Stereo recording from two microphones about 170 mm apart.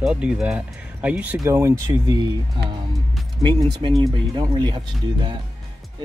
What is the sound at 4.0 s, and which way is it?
Speech, 25° right (ahead or behind).